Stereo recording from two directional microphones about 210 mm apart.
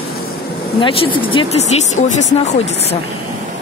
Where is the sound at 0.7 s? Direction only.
25° left (ahead or behind).